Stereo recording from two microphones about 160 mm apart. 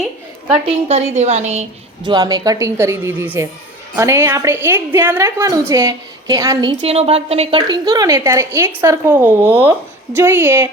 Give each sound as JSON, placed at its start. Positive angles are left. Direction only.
{"t": 0.7, "sound": "a woman's voice", "side_deg": -40}
{"t": 2.0, "sound": "a woman's voice", "side_deg": -25}
{"t": 6.9, "sound": "a woman's voice", "side_deg": -40}
{"t": 7.9, "sound": "speech", "side_deg": -20}